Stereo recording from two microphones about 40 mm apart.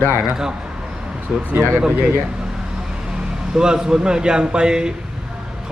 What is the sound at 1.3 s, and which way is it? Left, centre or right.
Speech, right.